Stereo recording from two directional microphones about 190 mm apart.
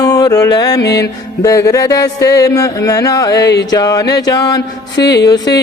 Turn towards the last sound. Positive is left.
turn(degrees=20)  # may be behind; listen again after turning